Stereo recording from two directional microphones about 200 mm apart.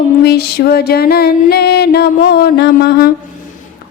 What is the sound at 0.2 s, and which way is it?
Music, 55° left (ahead or behind).